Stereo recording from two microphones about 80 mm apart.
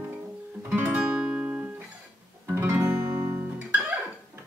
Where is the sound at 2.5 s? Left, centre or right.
Right.